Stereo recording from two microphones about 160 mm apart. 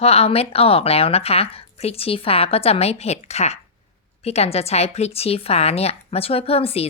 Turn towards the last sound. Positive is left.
turn(degrees=40)  # may be behind; listen again after turning